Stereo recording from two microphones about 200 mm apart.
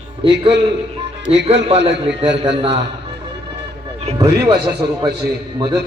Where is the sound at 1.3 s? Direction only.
30° right (ahead or behind).